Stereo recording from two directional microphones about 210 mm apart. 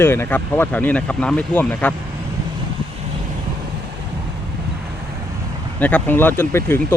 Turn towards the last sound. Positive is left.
turn(degrees=10)  # may be behind; listen again after turning